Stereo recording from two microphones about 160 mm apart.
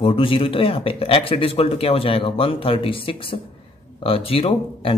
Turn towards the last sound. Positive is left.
turn(degrees=35)  # may be behind; listen again after turning